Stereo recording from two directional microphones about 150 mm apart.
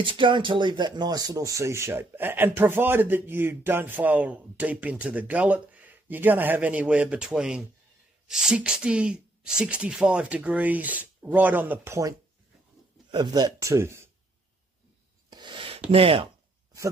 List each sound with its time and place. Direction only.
0.0 s speech: 35° right (ahead or behind); by 14.0 s 20° right (ahead or behind)
15.2 s a sound: 30° right (ahead or behind)
15.9 s speech: 35° right (ahead or behind)